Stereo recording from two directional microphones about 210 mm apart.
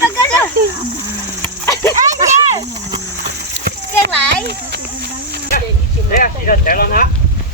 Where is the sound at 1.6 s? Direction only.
15° left (ahead or behind).